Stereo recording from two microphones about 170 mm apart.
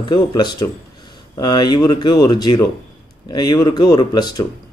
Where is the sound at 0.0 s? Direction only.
25° left (ahead or behind).